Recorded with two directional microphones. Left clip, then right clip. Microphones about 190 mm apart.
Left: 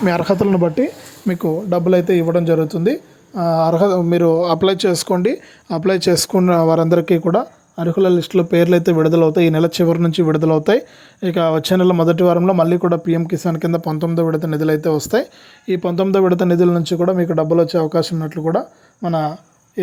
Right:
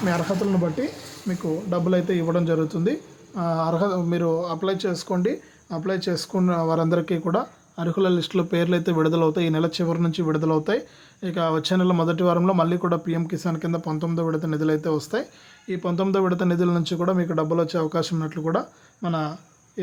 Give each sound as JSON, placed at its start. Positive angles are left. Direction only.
{"t": 0.0, "sound": "speech", "side_deg": 45}